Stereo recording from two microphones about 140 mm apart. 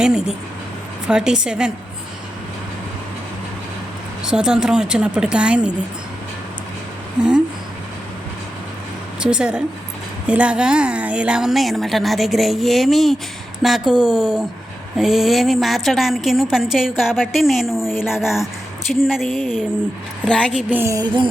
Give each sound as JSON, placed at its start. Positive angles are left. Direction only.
{"t": 0.0, "sound": "a woman's voice", "side_deg": -5}
{"t": 4.2, "sound": "a woman's voice", "side_deg": -5}
{"t": 7.2, "sound": "a woman's voice", "side_deg": -5}
{"t": 9.2, "sound": "a woman's voice", "side_deg": -5}
{"t": 20.5, "sound": "a woman's voice", "side_deg": -10}
{"t": 21.0, "sound": "music", "side_deg": -35}